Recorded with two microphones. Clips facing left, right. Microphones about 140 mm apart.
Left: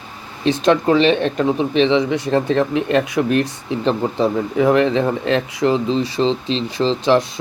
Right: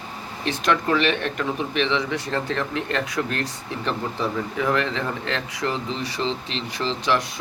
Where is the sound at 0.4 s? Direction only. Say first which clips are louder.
Left 8 dB; 25° left (ahead or behind).